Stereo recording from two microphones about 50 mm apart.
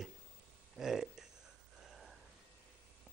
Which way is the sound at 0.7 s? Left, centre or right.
Centre.